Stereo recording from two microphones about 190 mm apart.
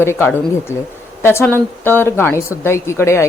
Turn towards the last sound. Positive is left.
turn(degrees=15)  # may be behind; listen again after turning